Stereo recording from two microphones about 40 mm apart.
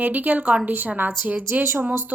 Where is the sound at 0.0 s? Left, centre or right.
Right.